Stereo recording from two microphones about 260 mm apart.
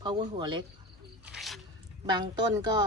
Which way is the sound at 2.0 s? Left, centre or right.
Centre.